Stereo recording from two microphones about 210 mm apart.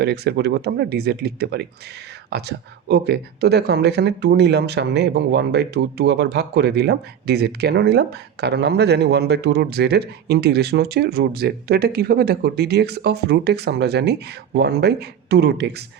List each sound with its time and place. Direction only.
0.0 s speech: 55° right (ahead or behind)